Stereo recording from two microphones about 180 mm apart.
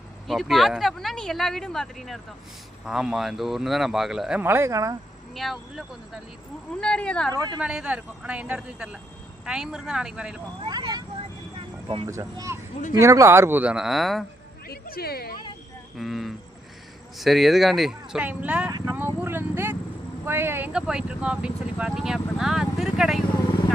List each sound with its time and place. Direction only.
0.3 s speech: centre (ahead or behind); by 4.9 s 20° right (ahead or behind)
5.3 s speech: centre (ahead or behind)
7.3 s speech: 20° right (ahead or behind)
7.6 s speech: 5° right (ahead or behind)
10.6 s speech: 25° right (ahead or behind)
11.5 s vehicle: 30° right (ahead or behind)
12.0 s speech: 15° right (ahead or behind); by 14.3 s centre (ahead or behind)
14.7 s speech: 60° left (ahead or behind)
16.0 s speech: centre (ahead or behind)